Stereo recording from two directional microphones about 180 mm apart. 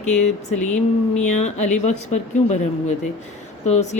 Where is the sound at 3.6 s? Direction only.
40° left (ahead or behind).